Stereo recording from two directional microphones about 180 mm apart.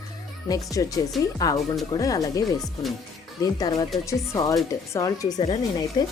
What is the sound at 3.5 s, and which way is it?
Speech, 20° left (ahead or behind).